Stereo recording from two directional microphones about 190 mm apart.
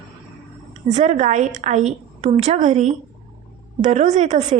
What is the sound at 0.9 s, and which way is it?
Speech, 35° right (ahead or behind).